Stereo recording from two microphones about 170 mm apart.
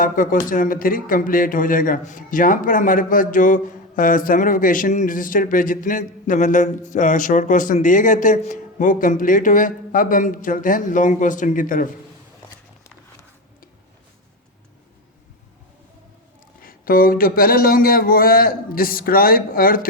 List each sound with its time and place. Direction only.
0.0 s a man's voice: 55° left (ahead or behind)
16.6 s speech: 60° left (ahead or behind)